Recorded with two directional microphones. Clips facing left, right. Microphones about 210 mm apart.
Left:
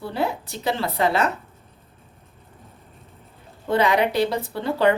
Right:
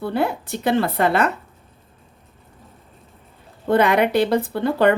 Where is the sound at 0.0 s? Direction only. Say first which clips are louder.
Right 4 dB; 55° right (ahead or behind).